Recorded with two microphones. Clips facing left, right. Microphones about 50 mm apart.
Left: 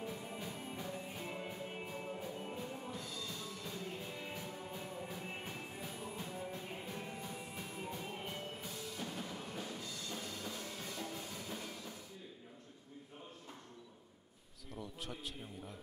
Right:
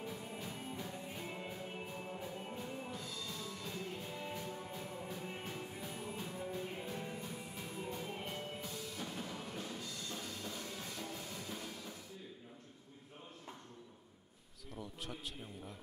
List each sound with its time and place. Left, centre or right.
0.0 s music: centre
2.1 s music: centre
5.2 s music: centre
5.8 s music: centre
7.0 s music: centre
14.7 s a man's voice: centre